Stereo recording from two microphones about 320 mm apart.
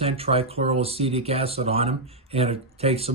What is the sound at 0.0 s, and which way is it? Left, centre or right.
Speech, centre.